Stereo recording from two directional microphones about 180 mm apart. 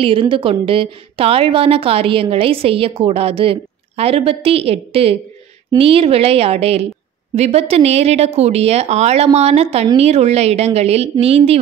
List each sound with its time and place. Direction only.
0.0 s a woman's voice: 30° right (ahead or behind)